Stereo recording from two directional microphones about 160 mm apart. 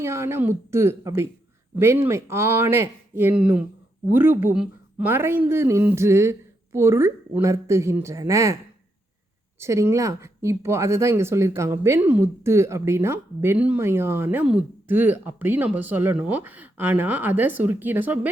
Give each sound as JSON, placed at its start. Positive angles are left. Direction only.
{"t": 0.0, "sound": "speech", "side_deg": -15}
{"t": 9.6, "sound": "speech", "side_deg": -15}